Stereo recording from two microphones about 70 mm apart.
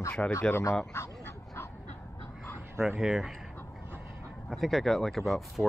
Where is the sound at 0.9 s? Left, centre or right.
Left.